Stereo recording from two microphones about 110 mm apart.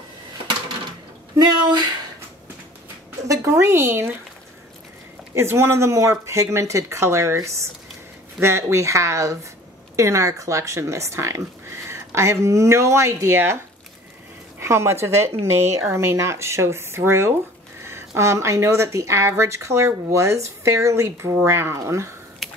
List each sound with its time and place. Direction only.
1.4 s speech: 40° right (ahead or behind)
3.3 s speech: 25° right (ahead or behind)
5.3 s speech: 25° right (ahead or behind)
14.6 s speech: 25° right (ahead or behind)
22.4 s a sound: centre (ahead or behind)